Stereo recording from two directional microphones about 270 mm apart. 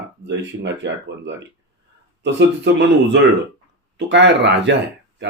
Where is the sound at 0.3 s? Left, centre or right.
Right.